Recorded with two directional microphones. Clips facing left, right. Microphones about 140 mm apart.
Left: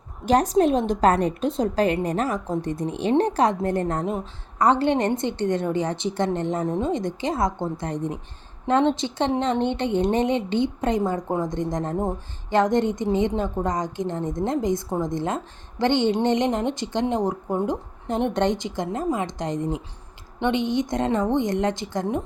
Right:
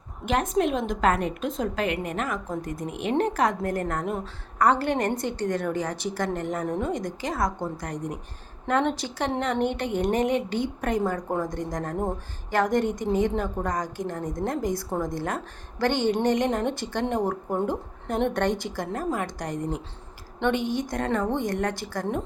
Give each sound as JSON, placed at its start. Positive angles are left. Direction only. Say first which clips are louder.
{"t": 0.3, "sound": "a woman's voice", "louder": "left 5 dB", "side_deg": 35}